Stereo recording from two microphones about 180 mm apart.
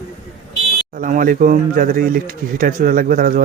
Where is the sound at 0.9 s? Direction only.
50° right (ahead or behind).